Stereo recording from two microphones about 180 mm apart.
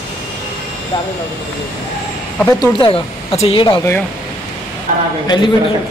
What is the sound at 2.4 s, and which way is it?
A man's voice, 25° left (ahead or behind).